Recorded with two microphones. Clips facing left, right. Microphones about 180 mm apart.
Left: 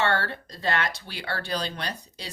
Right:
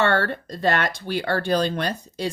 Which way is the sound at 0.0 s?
50° right (ahead or behind).